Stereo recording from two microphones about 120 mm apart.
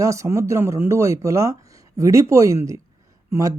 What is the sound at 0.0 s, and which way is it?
Speech, 25° right (ahead or behind).